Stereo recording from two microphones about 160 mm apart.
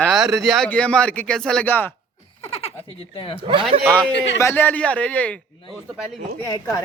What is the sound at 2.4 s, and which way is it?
Sheep, 40° left (ahead or behind).